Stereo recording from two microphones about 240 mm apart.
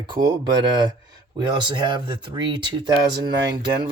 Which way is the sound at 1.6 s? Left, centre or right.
Centre.